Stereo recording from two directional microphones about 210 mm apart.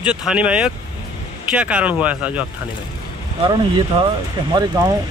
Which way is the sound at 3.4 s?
20° right (ahead or behind).